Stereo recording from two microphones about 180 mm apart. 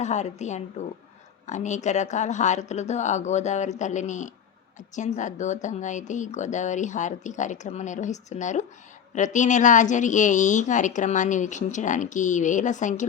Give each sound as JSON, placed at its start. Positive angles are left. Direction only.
{"t": 0.0, "sound": "a woman's voice", "side_deg": 40}